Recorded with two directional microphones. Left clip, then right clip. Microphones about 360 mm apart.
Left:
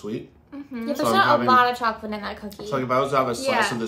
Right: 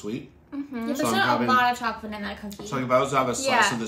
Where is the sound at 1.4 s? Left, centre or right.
Centre.